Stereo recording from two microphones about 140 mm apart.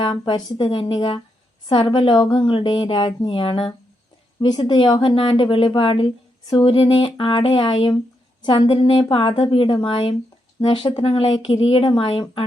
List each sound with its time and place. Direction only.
0.0 s speech: 35° left (ahead or behind)